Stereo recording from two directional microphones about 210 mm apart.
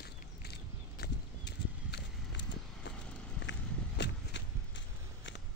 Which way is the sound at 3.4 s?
60° left (ahead or behind).